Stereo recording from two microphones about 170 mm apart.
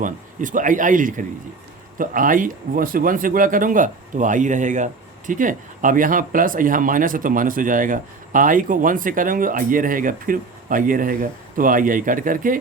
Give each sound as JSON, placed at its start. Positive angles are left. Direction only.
{"t": 0.0, "sound": "speech", "side_deg": -50}